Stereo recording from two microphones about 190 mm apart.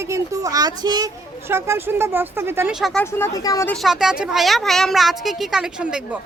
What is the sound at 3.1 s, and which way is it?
Speech, 15° left (ahead or behind).